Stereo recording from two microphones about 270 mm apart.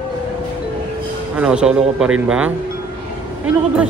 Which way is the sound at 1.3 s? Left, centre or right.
Centre.